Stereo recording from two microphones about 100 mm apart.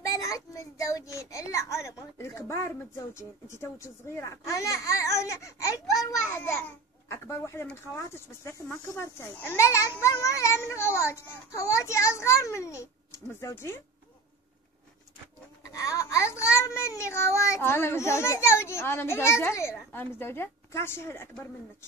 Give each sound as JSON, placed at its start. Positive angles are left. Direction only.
{"t": 0.0, "sound": "a sound", "side_deg": 35}
{"t": 1.1, "sound": "a child's voice", "side_deg": 30}
{"t": 15.8, "sound": "a child's voice", "side_deg": 30}